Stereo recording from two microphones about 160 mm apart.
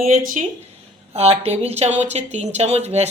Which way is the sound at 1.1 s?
40° right (ahead or behind).